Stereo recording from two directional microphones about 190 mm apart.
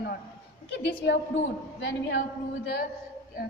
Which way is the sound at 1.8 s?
65° left (ahead or behind).